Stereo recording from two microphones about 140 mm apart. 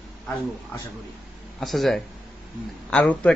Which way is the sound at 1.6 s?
Centre (ahead or behind).